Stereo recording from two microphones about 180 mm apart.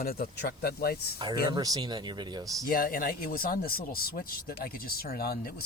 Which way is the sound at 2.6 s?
50° left (ahead or behind).